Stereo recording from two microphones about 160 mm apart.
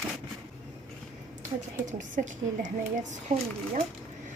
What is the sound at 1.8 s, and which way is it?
A woman's voice, 50° right (ahead or behind).